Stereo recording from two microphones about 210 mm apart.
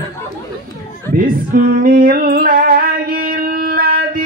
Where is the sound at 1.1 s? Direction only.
40° right (ahead or behind).